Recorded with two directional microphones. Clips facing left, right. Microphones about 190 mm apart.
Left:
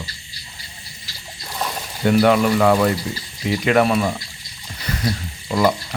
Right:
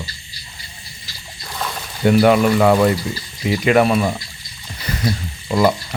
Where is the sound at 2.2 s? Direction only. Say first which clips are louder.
Right 2 dB; 15° right (ahead or behind).